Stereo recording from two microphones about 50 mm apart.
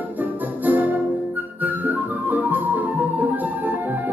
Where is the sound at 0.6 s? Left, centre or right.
Right.